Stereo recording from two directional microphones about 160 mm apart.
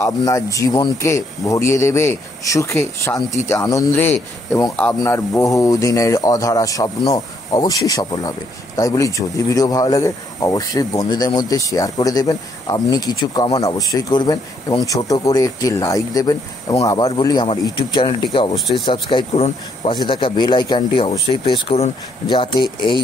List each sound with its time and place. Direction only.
0.0 s speech: 20° left (ahead or behind)